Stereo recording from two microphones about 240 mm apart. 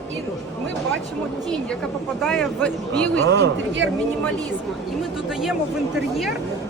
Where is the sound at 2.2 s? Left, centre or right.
Centre.